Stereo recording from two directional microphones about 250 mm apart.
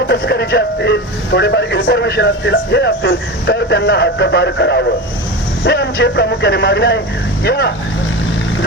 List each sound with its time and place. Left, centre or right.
0.1 s a man's voice: left